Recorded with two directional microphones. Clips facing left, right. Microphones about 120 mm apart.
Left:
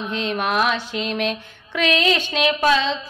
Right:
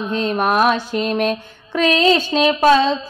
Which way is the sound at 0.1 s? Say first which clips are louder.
Right 5 dB; 40° right (ahead or behind).